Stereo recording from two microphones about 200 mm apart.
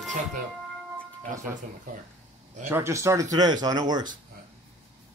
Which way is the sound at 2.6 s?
10° right (ahead or behind).